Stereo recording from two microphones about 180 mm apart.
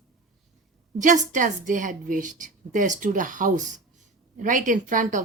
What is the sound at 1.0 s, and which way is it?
A woman's voice, 45° right (ahead or behind).